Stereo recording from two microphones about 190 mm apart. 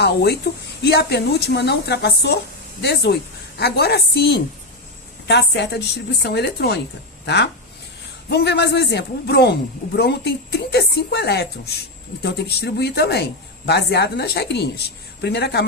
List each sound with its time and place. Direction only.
0.0 s a man's voice: 60° left (ahead or behind)
8.3 s a man's voice: 60° left (ahead or behind)